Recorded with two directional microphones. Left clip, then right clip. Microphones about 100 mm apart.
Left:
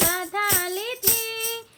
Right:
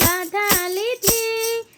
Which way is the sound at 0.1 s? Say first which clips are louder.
Right 4 dB; 30° right (ahead or behind).